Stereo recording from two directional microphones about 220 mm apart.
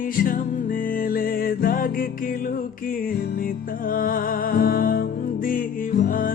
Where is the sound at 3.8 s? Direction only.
40° left (ahead or behind).